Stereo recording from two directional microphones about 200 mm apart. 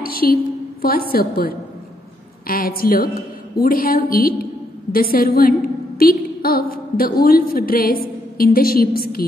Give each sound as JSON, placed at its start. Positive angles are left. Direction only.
{"t": 0.0, "sound": "a woman's voice", "side_deg": 45}